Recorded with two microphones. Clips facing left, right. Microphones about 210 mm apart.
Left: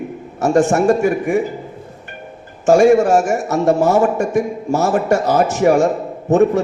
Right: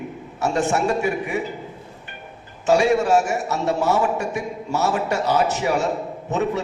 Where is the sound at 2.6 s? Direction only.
50° left (ahead or behind).